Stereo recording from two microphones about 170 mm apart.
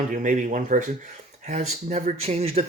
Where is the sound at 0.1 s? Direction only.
50° right (ahead or behind).